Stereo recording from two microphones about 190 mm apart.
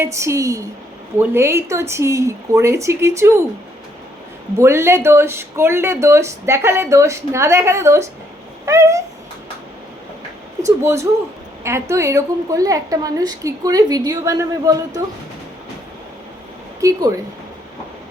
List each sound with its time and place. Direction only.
0.0 s speech: 15° right (ahead or behind)
4.5 s speech: 15° right (ahead or behind)
10.7 s speech: 15° right (ahead or behind)
16.8 s speech: 20° right (ahead or behind)